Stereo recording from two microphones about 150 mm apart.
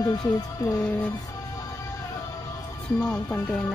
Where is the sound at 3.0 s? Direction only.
10° left (ahead or behind).